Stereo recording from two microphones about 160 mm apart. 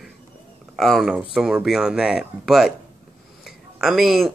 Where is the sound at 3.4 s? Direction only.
Centre (ahead or behind).